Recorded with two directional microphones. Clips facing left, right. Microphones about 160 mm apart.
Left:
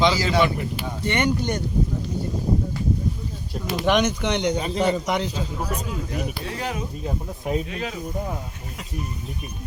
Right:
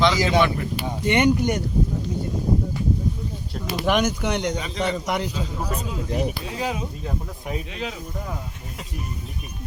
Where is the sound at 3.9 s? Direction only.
5° right (ahead or behind).